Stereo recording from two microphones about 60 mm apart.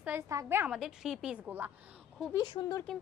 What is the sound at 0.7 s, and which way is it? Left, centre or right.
Speech, centre.